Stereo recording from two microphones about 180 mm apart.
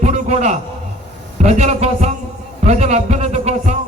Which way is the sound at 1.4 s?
40° right (ahead or behind).